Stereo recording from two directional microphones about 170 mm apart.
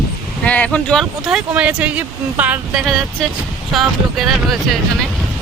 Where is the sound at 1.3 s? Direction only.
5° right (ahead or behind).